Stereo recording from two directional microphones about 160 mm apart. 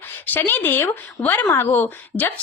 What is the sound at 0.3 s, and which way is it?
Speech, 10° left (ahead or behind).